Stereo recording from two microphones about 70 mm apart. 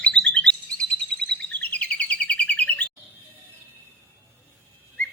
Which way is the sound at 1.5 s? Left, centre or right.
Left.